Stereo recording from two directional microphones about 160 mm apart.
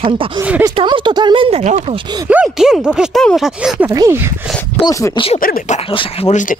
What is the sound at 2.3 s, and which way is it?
Speech, 5° right (ahead or behind).